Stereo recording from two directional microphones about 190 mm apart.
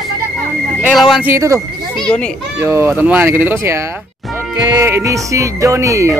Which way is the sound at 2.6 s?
10° right (ahead or behind).